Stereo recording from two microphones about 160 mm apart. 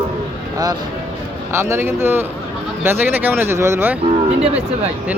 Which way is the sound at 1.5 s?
15° right (ahead or behind).